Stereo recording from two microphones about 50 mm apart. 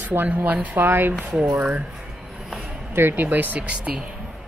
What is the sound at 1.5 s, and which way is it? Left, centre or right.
Speech, right.